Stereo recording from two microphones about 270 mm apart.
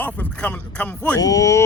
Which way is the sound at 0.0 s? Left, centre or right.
Centre.